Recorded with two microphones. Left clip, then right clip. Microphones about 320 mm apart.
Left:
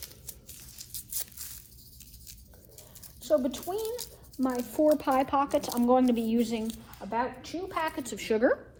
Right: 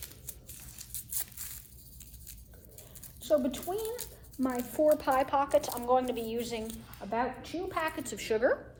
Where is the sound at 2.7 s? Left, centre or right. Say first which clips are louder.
Left 1 dB; centre.